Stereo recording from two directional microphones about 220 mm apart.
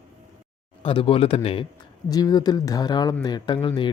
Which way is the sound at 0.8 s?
25° left (ahead or behind).